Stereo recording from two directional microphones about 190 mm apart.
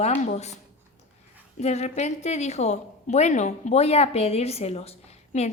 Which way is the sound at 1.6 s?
35° left (ahead or behind).